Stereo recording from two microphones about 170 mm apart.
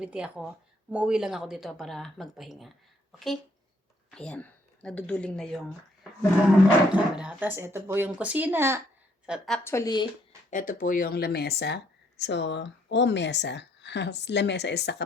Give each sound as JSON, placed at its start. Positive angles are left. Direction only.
{"t": 0.0, "sound": "speech", "side_deg": -5}
{"t": 9.6, "sound": "speech", "side_deg": 20}
{"t": 10.5, "sound": "speech", "side_deg": 50}